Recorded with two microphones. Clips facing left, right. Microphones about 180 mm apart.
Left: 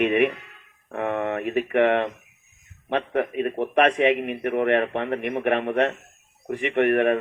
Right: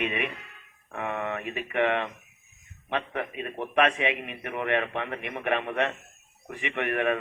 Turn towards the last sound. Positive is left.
turn(degrees=45)  # may be behind; listen again after turning